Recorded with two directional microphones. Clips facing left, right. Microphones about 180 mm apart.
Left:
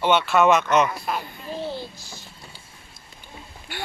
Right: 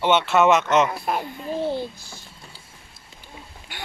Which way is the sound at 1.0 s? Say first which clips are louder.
Right 3 dB; 50° right (ahead or behind).